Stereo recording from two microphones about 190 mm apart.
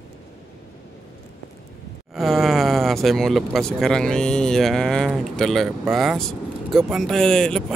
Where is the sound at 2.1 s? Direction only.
Centre (ahead or behind).